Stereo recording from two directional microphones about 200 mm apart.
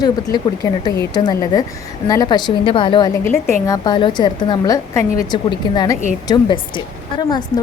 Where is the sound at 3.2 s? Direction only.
10° left (ahead or behind).